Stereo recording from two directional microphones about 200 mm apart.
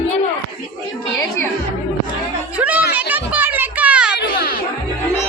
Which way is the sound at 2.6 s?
5° right (ahead or behind).